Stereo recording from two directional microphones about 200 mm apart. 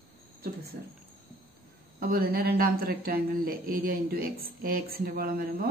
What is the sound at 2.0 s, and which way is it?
Speech, 50° right (ahead or behind).